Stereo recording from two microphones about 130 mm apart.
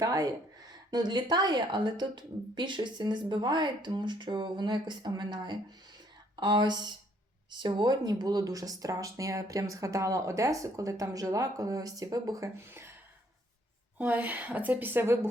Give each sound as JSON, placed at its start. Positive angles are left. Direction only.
{"t": 0.0, "sound": "a woman's voice", "side_deg": -30}
{"t": 14.0, "sound": "a woman's voice", "side_deg": -15}